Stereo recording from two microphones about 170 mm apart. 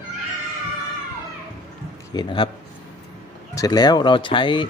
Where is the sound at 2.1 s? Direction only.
30° left (ahead or behind).